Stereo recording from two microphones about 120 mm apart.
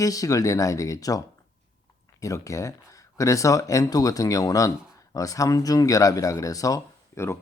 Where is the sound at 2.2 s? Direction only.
25° left (ahead or behind).